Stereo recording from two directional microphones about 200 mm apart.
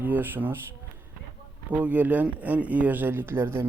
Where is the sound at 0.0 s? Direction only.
10° right (ahead or behind).